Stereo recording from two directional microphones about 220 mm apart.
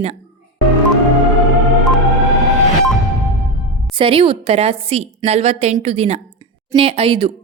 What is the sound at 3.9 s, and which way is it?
A woman's voice, 25° right (ahead or behind).